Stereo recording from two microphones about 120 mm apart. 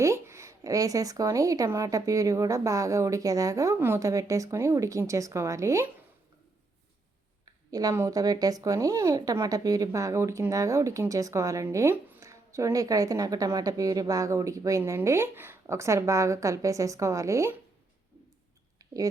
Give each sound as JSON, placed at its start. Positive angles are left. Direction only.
{"t": 0.0, "sound": "speech", "side_deg": -25}
{"t": 7.4, "sound": "speech", "side_deg": -30}
{"t": 18.8, "sound": "a sound", "side_deg": -25}